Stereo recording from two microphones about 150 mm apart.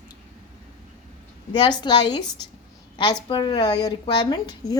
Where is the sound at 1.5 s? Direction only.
30° left (ahead or behind).